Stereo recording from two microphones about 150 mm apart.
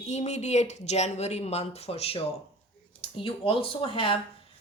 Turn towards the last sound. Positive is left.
turn(degrees=35)  # may be behind; listen again after turning